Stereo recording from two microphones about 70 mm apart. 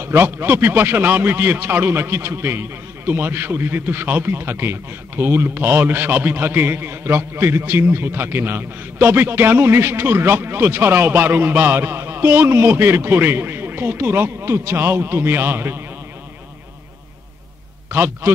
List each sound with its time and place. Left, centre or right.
0.0 s a man's voice: right
17.9 s a man's voice: right